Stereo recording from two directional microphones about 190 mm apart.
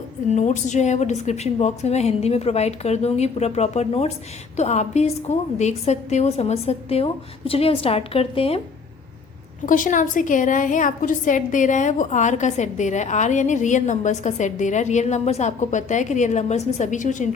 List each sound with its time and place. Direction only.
0.3 s a woman's voice: 40° left (ahead or behind)
9.6 s a woman's voice: 45° left (ahead or behind)